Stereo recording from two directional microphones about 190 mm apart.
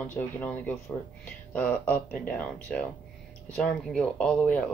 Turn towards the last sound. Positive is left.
turn(degrees=5)  # may be behind; listen again after turning